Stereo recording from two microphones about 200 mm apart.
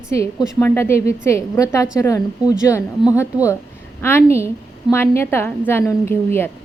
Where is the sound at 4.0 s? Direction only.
10° left (ahead or behind).